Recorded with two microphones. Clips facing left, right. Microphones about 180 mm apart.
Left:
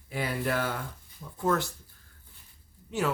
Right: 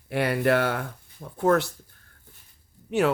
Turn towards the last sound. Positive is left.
turn(degrees=-65)  # may be behind; listen again after turning